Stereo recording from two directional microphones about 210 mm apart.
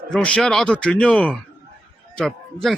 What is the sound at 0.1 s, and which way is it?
A man's voice, 5° left (ahead or behind).